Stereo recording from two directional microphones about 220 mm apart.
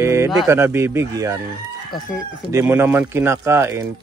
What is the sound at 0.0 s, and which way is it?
Speech, 15° right (ahead or behind).